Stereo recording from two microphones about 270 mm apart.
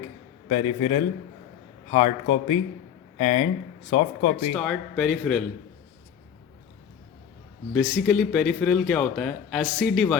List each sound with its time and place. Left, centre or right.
0.4 s speech: left
4.5 s speech: centre
7.7 s speech: centre